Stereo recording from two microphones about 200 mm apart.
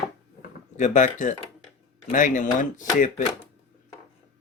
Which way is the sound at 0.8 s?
40° left (ahead or behind).